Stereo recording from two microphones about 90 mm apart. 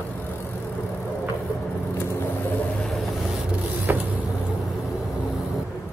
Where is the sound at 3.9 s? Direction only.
20° right (ahead or behind).